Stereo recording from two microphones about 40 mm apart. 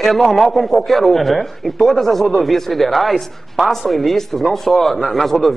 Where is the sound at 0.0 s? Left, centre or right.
Centre.